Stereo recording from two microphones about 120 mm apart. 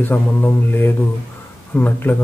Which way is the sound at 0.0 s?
15° left (ahead or behind).